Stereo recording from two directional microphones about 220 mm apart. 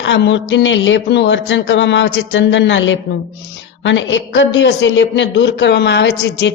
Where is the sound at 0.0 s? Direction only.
55° left (ahead or behind).